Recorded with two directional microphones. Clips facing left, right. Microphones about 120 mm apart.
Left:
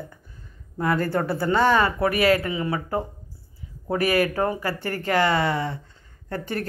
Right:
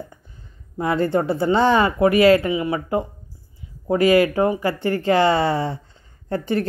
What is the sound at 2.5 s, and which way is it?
Speech, 15° right (ahead or behind).